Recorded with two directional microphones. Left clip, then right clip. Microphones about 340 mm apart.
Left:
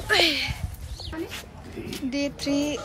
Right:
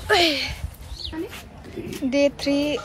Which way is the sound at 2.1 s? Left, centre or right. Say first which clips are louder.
Right 8 dB; centre.